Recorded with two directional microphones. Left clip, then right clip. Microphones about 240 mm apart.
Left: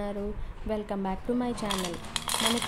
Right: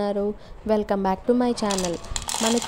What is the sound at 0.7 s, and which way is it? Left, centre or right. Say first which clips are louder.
Cutlery: right 10 dB; right.